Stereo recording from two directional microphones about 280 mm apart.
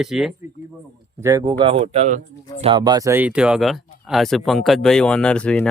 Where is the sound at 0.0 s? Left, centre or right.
Centre.